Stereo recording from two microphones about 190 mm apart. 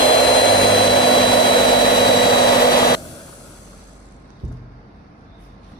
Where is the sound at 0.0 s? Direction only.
25° left (ahead or behind).